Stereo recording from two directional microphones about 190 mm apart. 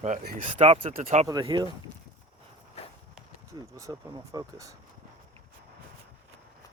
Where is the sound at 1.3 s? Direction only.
20° right (ahead or behind).